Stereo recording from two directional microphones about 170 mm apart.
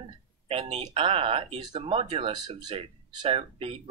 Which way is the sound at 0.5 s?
35° right (ahead or behind).